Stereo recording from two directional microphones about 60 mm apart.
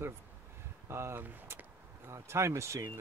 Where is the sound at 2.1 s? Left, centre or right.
Right.